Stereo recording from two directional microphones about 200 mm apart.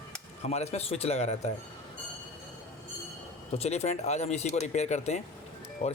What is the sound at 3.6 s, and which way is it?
Speech, 35° left (ahead or behind).